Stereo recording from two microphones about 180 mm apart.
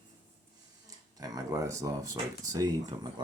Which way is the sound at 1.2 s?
20° right (ahead or behind).